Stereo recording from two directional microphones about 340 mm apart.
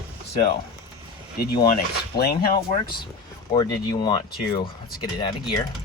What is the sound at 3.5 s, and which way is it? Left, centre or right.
Speech, centre.